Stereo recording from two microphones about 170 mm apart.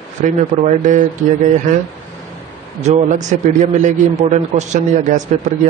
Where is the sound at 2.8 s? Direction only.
45° right (ahead or behind).